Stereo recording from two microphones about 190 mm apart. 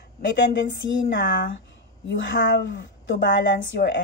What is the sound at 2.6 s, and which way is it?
Speech, 65° left (ahead or behind).